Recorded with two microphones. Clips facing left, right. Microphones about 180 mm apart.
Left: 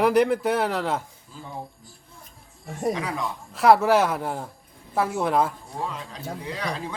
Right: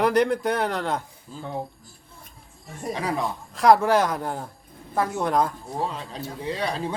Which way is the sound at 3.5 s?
5° left (ahead or behind).